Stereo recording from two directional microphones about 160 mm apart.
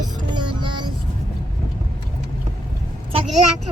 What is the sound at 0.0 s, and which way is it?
Music, 30° right (ahead or behind).